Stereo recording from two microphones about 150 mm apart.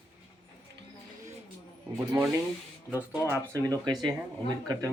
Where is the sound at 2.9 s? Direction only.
10° right (ahead or behind).